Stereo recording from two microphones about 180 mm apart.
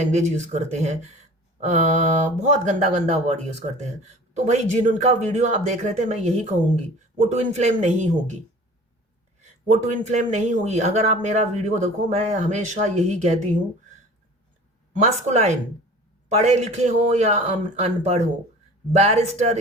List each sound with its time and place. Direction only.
0.0 s speech: 40° right (ahead or behind)
9.4 s speech: 40° right (ahead or behind)
14.9 s speech: 40° right (ahead or behind)